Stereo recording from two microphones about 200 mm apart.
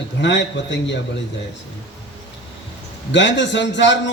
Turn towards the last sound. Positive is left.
turn(degrees=65)  # may be behind; listen again after turning